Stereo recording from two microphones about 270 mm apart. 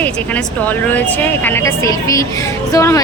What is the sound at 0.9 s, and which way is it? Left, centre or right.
A woman's voice, centre.